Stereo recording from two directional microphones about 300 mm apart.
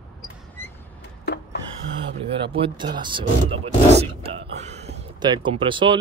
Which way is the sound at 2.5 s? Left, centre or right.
Centre.